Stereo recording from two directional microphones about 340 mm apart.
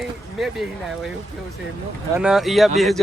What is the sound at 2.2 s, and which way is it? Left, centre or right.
Speech, centre.